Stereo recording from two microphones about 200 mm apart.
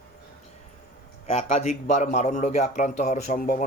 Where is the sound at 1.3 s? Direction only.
35° left (ahead or behind).